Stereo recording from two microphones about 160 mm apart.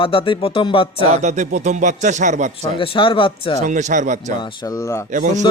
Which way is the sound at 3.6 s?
50° right (ahead or behind).